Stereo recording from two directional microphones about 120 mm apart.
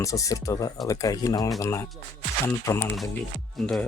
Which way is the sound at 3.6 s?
Centre (ahead or behind).